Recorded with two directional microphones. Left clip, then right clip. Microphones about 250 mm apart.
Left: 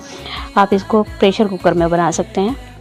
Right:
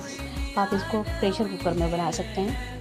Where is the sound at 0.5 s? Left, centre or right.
Left.